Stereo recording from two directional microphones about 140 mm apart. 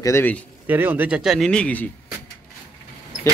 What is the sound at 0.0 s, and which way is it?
Speech, 15° left (ahead or behind).